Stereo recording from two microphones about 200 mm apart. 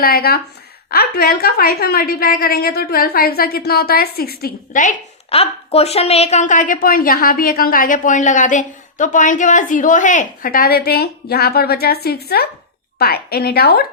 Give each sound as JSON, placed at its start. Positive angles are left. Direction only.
{"t": 0.0, "sound": "a woman's voice", "side_deg": 50}